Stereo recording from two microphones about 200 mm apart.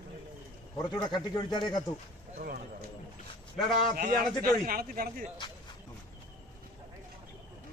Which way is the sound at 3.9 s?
45° right (ahead or behind).